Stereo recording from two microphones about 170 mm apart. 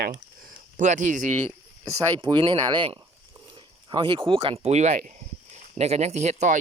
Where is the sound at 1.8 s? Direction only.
25° right (ahead or behind).